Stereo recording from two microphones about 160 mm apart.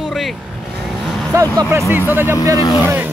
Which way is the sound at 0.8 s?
Centre (ahead or behind).